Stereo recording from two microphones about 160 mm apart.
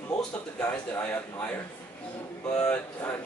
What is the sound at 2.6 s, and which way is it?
Speech, 10° left (ahead or behind).